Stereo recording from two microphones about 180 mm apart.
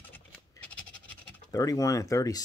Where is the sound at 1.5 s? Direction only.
20° left (ahead or behind).